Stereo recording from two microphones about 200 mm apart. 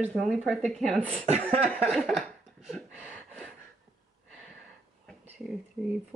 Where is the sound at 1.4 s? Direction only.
5° left (ahead or behind).